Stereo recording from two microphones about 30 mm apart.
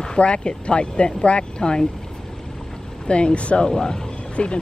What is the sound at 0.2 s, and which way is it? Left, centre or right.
Speech, left.